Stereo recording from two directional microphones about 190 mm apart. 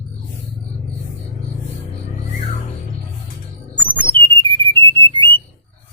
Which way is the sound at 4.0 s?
25° right (ahead or behind).